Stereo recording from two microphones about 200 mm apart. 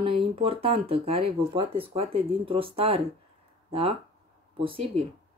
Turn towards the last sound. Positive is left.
turn(degrees=-25)  # may be behind; listen again after turning